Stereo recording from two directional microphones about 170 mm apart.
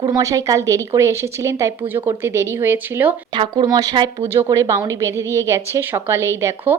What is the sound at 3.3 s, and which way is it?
A woman's voice, 25° right (ahead or behind).